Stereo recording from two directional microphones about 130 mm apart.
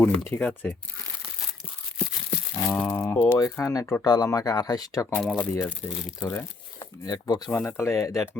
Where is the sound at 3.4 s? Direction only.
25° left (ahead or behind).